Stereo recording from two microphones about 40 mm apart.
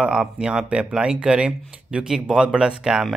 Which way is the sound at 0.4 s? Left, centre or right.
Right.